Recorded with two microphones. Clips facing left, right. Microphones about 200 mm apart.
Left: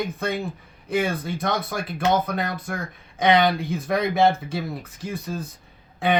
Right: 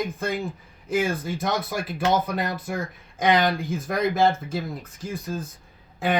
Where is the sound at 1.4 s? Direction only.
55° left (ahead or behind).